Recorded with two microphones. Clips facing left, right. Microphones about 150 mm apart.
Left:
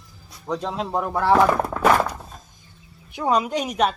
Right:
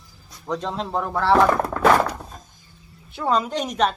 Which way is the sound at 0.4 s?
5° left (ahead or behind).